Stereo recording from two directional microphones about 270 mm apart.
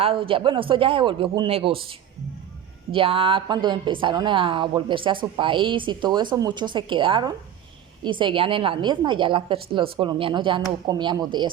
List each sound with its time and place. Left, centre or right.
0.0 s a woman's voice: centre